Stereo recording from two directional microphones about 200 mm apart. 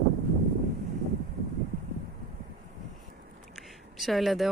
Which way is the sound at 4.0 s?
Centre (ahead or behind).